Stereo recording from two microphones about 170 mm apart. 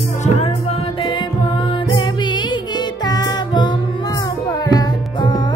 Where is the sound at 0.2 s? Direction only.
40° left (ahead or behind).